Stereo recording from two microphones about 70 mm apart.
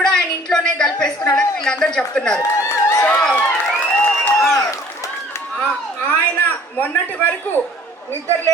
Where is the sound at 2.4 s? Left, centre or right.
Left.